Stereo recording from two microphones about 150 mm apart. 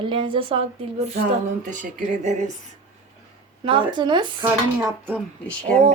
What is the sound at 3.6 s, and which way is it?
Speech, 35° right (ahead or behind).